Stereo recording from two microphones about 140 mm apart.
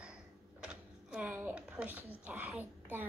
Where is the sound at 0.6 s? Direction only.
5° right (ahead or behind).